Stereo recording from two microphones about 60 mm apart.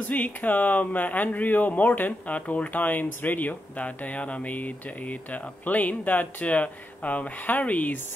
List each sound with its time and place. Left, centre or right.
0.1 s speech: left